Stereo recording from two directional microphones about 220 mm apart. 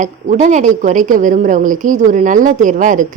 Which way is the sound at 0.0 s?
35° right (ahead or behind).